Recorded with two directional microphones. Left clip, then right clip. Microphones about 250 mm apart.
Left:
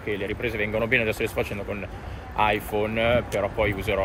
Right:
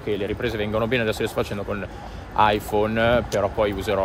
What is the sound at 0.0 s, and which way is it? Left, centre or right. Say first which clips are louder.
Speech: right 3 dB; right.